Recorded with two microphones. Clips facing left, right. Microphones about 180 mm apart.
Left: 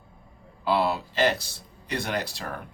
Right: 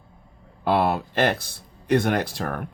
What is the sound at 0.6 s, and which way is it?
Speech, 55° right (ahead or behind).